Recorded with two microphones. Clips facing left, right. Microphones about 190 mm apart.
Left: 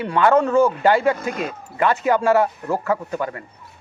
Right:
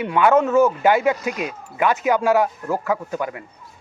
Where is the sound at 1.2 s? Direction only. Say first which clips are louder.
Even; 50° left (ahead or behind).